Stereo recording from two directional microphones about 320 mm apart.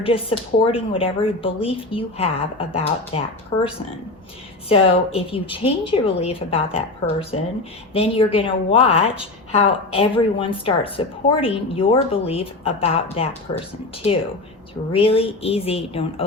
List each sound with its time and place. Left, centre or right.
0.0 s a woman's voice: centre
4.7 s a woman's voice: centre
14.9 s a woman's voice: centre